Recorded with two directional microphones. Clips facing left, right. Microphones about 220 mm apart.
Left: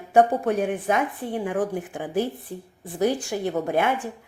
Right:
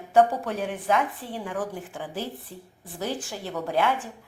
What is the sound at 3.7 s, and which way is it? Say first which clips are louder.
Speech: even; 50° left (ahead or behind).